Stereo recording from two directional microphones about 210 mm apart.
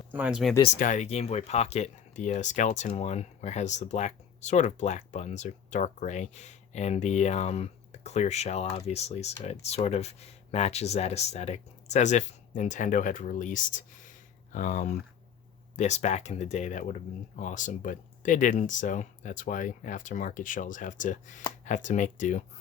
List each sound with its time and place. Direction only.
0.1 s speech: 5° right (ahead or behind)
0.8 s speech: 35° left (ahead or behind)